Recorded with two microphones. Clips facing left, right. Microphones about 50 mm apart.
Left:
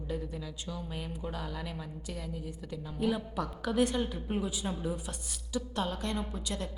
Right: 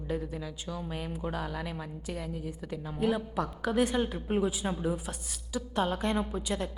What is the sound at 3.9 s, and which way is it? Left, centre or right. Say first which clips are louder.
Speech: right 4 dB; right.